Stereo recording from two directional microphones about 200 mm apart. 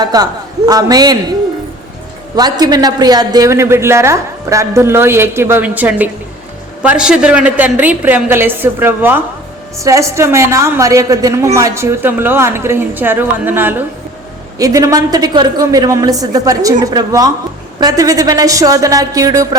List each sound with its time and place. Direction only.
0.0 s a man's voice: 20° right (ahead or behind)
2.3 s a woman's voice: 20° right (ahead or behind)